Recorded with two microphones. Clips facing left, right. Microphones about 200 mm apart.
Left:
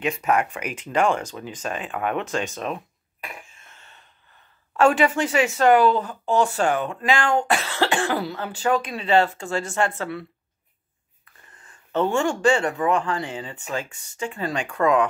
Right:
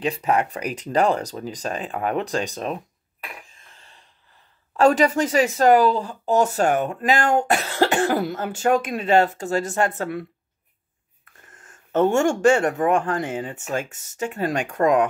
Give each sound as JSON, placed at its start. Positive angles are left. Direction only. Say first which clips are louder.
{"t": 0.0, "sound": "speech", "louder": "right 1 dB", "side_deg": -30}
{"t": 3.4, "sound": "a sound", "louder": "left 1 dB", "side_deg": -35}
{"t": 4.7, "sound": "speech", "louder": "right 2 dB", "side_deg": -40}
{"t": 11.4, "sound": "speech", "louder": "right 2 dB", "side_deg": -45}